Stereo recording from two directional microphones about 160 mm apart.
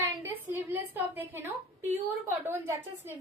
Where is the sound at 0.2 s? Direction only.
15° right (ahead or behind).